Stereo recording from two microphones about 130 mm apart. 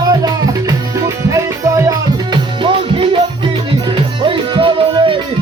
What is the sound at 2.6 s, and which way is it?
Music, 40° right (ahead or behind).